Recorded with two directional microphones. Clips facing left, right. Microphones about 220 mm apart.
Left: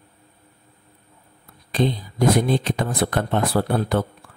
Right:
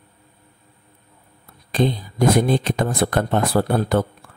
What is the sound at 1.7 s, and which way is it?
Speech, 45° right (ahead or behind).